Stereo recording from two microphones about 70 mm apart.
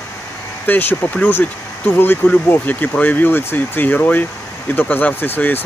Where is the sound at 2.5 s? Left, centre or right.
Left.